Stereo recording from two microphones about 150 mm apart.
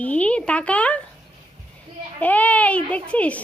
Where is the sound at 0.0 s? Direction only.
10° left (ahead or behind).